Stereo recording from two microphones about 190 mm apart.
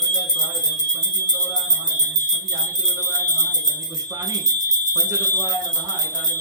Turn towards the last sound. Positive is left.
turn(degrees=-15)  # may be behind; listen again after turning